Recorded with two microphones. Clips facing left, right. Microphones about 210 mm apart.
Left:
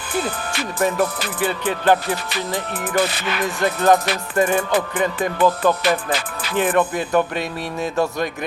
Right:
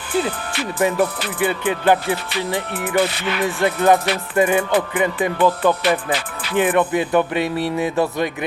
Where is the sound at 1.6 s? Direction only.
15° right (ahead or behind).